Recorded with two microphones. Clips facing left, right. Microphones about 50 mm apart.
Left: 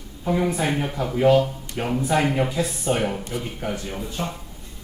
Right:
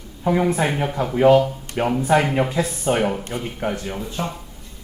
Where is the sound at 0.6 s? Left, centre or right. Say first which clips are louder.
Right 3 dB; right.